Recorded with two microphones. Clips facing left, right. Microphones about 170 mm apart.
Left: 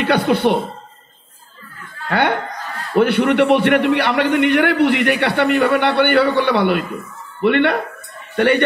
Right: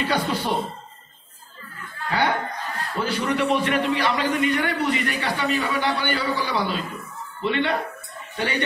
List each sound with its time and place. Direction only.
0.0 s a man's voice: 65° left (ahead or behind)
2.0 s a man's voice: 65° left (ahead or behind)